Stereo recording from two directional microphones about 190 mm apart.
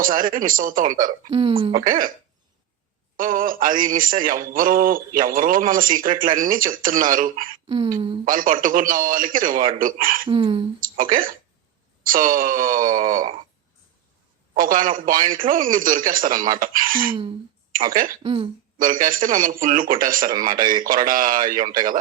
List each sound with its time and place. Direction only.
0.0 s a man's voice: 45° right (ahead or behind)
1.3 s speech: 30° right (ahead or behind)
1.7 s a man's voice: 45° right (ahead or behind)
3.2 s a man's voice: 45° right (ahead or behind)
10.2 s speech: 25° right (ahead or behind)
10.8 s a man's voice: 45° right (ahead or behind)
14.5 s a man's voice: 45° right (ahead or behind)
18.2 s speech: 30° right (ahead or behind)
18.8 s a man's voice: 45° right (ahead or behind)